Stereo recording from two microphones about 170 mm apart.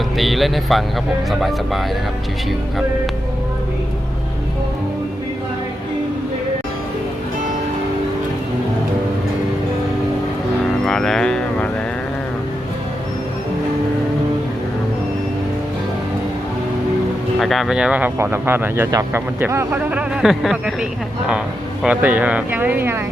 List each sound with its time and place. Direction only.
0.2 s speech: centre (ahead or behind)
10.8 s speech: 5° left (ahead or behind)
17.4 s speech: centre (ahead or behind)
21.8 s speech: 10° right (ahead or behind)